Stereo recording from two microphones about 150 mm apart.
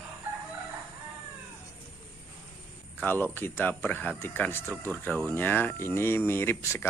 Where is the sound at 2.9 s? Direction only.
15° left (ahead or behind).